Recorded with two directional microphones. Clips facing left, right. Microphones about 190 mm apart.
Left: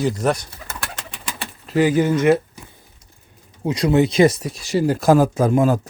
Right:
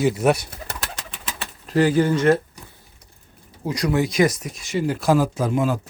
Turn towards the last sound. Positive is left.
turn(degrees=45)  # may be behind; listen again after turning